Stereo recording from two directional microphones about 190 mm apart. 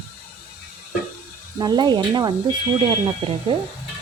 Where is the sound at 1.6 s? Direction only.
20° right (ahead or behind).